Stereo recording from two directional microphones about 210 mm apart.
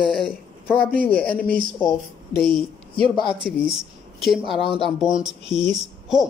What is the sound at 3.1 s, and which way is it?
Speech, 20° left (ahead or behind).